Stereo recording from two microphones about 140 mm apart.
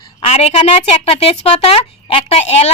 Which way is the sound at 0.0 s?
45° left (ahead or behind).